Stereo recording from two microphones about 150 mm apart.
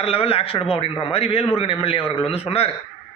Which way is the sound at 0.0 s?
40° left (ahead or behind).